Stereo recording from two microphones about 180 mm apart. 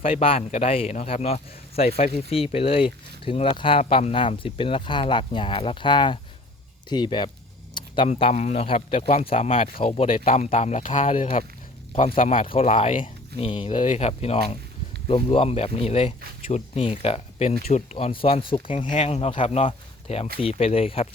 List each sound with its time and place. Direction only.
0.0 s speech: 30° left (ahead or behind)
7.7 s keys jangling: 25° left (ahead or behind)
8.0 s speech: 40° left (ahead or behind)
12.3 s speech: 30° left (ahead or behind)